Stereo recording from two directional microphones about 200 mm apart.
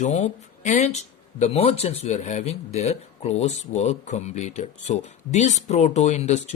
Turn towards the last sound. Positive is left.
turn(degrees=35)  # may be behind; listen again after turning